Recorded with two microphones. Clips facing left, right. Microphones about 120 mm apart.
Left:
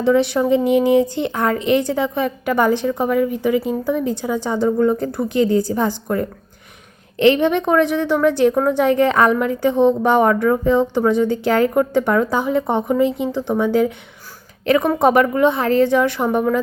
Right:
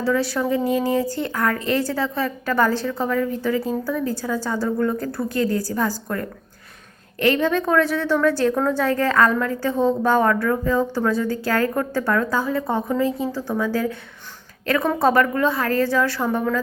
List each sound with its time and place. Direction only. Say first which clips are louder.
0.0 s a woman's voice: left 6 dB; 20° left (ahead or behind)